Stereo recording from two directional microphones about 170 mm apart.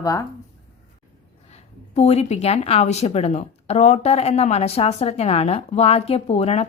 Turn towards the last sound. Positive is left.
turn(degrees=35)  # may be behind; listen again after turning